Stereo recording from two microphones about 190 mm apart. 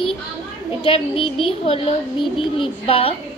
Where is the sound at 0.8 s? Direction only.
30° left (ahead or behind).